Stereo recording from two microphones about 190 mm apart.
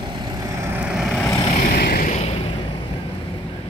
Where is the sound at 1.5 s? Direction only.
50° left (ahead or behind); by 2.6 s 30° left (ahead or behind).